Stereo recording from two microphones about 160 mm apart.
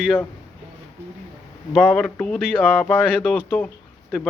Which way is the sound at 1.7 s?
5° left (ahead or behind).